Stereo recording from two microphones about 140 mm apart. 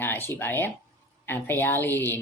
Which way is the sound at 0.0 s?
15° left (ahead or behind).